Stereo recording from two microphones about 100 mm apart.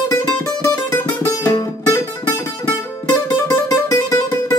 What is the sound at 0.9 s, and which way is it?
Music, 25° left (ahead or behind).